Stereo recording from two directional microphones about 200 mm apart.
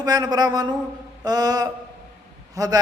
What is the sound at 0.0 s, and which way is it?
Speech, 20° right (ahead or behind).